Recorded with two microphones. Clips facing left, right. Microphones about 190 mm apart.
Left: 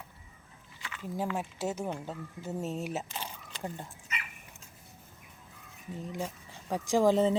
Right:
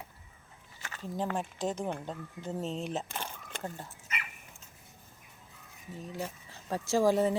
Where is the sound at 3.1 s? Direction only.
55° right (ahead or behind).